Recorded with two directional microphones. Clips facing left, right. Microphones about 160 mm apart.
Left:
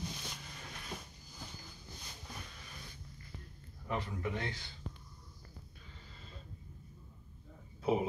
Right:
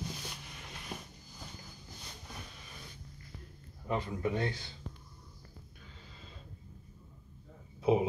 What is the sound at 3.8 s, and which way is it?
Speech, 30° right (ahead or behind).